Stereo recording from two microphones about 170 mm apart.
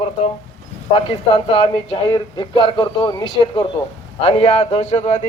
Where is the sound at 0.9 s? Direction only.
30° left (ahead or behind).